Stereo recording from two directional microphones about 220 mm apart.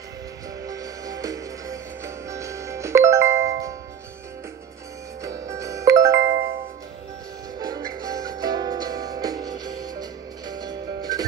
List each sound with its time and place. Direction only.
0.7 s music: 15° right (ahead or behind)
5.2 s music: 15° right (ahead or behind)
7.5 s music: 15° right (ahead or behind)